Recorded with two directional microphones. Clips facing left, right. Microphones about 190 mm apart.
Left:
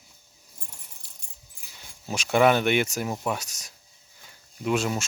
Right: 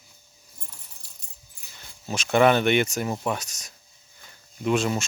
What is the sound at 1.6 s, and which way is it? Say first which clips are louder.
Speech: right 1 dB; 10° left (ahead or behind).